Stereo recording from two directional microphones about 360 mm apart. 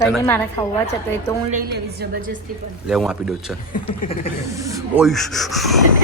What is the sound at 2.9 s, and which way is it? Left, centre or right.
Speech, centre.